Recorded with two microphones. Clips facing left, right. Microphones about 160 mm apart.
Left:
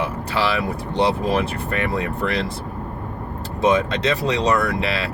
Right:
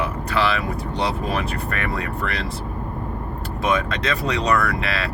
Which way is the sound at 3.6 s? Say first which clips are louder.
Left 4 dB; 25° left (ahead or behind).